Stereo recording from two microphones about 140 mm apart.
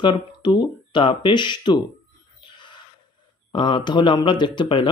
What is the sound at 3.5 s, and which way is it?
Speech, 35° left (ahead or behind).